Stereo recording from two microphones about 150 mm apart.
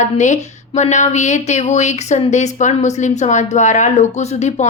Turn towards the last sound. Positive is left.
turn(degrees=50)  # may be behind; listen again after turning